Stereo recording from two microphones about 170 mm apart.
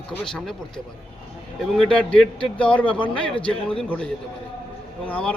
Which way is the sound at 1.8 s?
5° left (ahead or behind).